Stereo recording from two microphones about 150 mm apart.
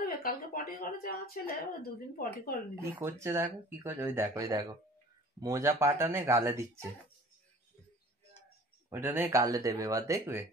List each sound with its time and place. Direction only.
0.0 s speech: 75° left (ahead or behind)
2.8 s speech: 20° right (ahead or behind)
8.9 s speech: 15° right (ahead or behind)